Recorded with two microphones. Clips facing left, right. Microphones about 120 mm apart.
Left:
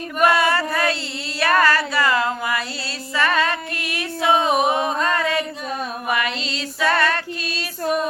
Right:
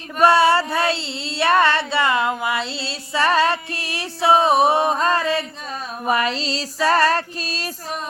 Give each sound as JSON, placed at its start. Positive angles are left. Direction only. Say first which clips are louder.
{"t": 0.2, "sound": "a sound", "louder": "right 3 dB", "side_deg": -30}
{"t": 1.4, "sound": "female singing", "louder": "right 1 dB", "side_deg": -25}
{"t": 3.2, "sound": "music", "louder": "right 3 dB", "side_deg": -30}
{"t": 6.1, "sound": "female singing", "louder": "right 5 dB", "side_deg": -35}